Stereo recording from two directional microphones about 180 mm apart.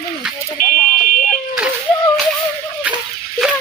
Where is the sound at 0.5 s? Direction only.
50° left (ahead or behind).